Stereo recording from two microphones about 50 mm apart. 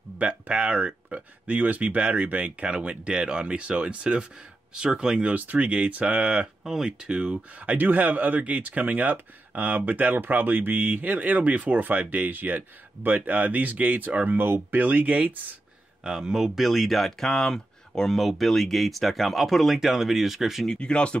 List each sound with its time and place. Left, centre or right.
0.2 s speech: right
5.3 s speech: right
6.6 s speech: centre
7.6 s speech: right
16.0 s speech: centre
20.6 s speech: centre